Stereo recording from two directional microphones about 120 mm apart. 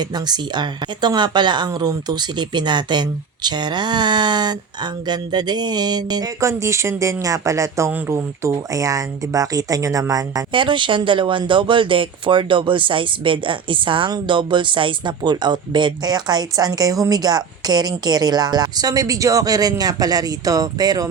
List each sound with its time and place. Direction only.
0.0 s speech: 35° right (ahead or behind)
10.5 s speech: 45° right (ahead or behind)